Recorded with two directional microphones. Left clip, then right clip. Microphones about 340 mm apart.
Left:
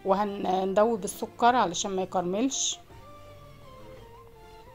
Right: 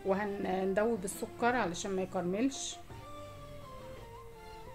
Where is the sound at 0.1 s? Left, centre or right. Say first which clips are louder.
Left 8 dB; centre.